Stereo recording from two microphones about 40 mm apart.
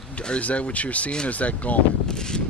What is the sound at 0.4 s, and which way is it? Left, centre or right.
Speech, left.